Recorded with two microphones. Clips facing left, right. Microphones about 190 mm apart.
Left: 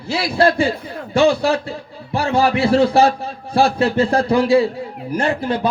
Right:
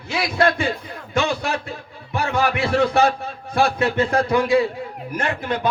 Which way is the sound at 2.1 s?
30° left (ahead or behind).